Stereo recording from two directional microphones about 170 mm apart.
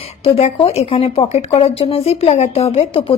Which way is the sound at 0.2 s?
35° left (ahead or behind).